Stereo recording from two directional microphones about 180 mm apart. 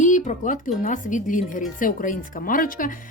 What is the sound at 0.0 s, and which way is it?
Speech, 45° left (ahead or behind).